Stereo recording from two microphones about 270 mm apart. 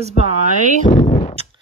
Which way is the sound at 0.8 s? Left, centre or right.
Left.